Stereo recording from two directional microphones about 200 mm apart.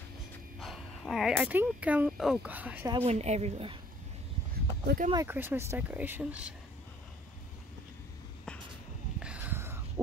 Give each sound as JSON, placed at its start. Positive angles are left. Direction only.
{"t": 0.6, "sound": "speech", "side_deg": 0}
{"t": 3.1, "sound": "speech", "side_deg": -35}
{"t": 4.8, "sound": "speech", "side_deg": -45}
{"t": 5.1, "sound": "speech", "side_deg": -10}
{"t": 9.2, "sound": "a sound", "side_deg": -5}